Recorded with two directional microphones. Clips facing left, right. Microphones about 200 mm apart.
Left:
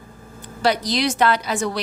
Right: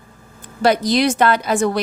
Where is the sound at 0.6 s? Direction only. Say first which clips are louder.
Right 5 dB; 50° right (ahead or behind).